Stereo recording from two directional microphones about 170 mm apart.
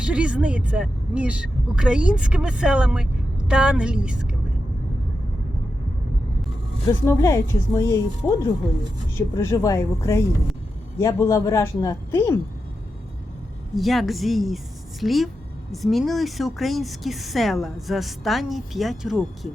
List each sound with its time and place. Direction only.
0.0 s speech: 5° right (ahead or behind)
6.8 s speech: 15° left (ahead or behind)
13.7 s speech: centre (ahead or behind)